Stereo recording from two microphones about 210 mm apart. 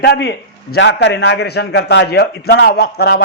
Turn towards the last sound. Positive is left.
turn(degrees=50)  # may be behind; listen again after turning